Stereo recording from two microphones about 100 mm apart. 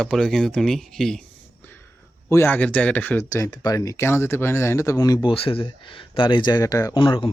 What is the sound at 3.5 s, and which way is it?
Speech, 45° left (ahead or behind).